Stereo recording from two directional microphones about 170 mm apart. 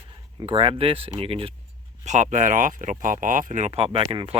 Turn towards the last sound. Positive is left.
turn(degrees=-30)  # may be behind; listen again after turning